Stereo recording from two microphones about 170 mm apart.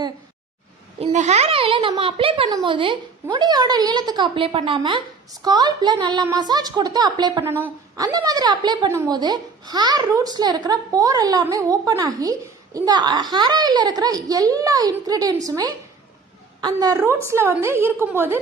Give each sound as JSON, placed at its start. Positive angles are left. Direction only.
{"t": 0.9, "sound": "a child's voice", "side_deg": -45}